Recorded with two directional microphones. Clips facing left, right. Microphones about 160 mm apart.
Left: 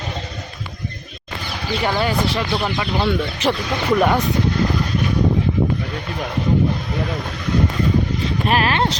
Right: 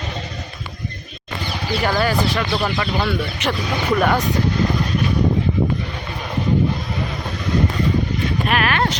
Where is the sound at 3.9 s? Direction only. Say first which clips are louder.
Left 2 dB; 10° left (ahead or behind).